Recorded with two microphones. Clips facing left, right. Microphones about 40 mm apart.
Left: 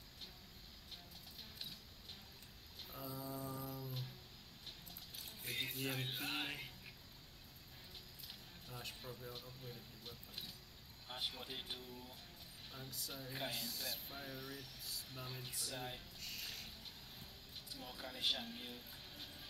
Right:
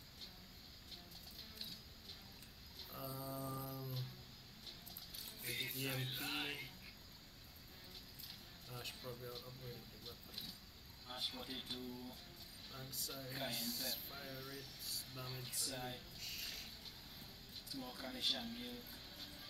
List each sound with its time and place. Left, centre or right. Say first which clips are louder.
3.0 s mantra: even; centre
5.7 s music: left 1 dB; centre
8.7 s speech: right 1 dB; centre
9.3 s speech: even; centre
12.8 s speech: even; centre
16.2 s a sound: even; centre
17.6 s speech: right 2 dB; centre